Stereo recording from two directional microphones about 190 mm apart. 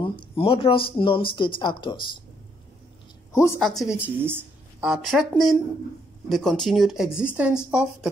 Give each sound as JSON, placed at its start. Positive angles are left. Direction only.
{"t": 0.0, "sound": "speech", "side_deg": 25}
{"t": 3.3, "sound": "a woman's voice", "side_deg": 15}
{"t": 3.6, "sound": "a woman's voice", "side_deg": 0}